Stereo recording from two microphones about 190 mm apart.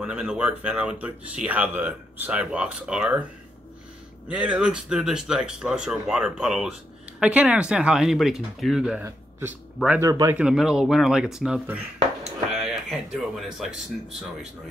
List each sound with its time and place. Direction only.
0.0 s a man's voice: 5° right (ahead or behind)
4.3 s a man's voice: 5° right (ahead or behind)
10.4 s speech: 5° right (ahead or behind)
12.5 s a sound: centre (ahead or behind)